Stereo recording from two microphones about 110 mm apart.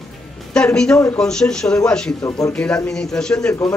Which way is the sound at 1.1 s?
5° left (ahead or behind).